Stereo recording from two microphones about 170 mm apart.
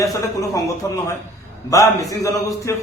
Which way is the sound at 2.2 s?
20° left (ahead or behind).